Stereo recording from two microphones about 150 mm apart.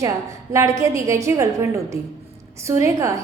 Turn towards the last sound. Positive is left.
turn(degrees=-20)  # may be behind; listen again after turning